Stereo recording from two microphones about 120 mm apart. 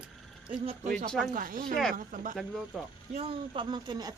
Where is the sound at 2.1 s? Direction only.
90° right.